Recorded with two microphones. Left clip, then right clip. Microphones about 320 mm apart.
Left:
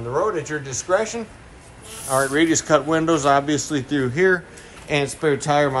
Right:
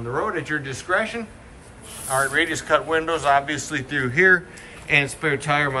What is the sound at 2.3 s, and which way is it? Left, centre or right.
A man's voice, left.